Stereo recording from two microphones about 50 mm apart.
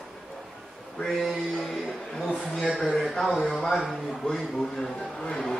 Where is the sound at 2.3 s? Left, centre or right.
Centre.